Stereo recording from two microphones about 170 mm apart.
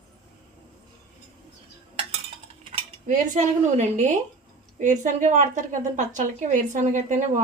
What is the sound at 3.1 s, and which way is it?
A woman's voice, 45° right (ahead or behind).